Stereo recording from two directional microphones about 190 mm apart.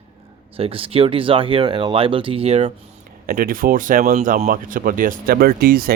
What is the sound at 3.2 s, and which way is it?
Speech, 50° right (ahead or behind).